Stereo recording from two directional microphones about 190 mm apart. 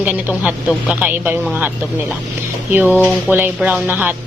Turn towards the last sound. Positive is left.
turn(degrees=-10)  # may be behind; listen again after turning